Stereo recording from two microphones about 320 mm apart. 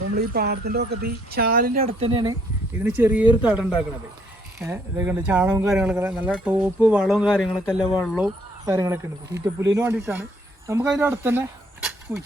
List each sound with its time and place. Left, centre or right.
0.2 s speech: right
2.8 s speech: centre